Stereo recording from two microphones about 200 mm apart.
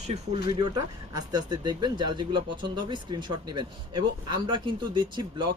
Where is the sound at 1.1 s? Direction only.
20° right (ahead or behind).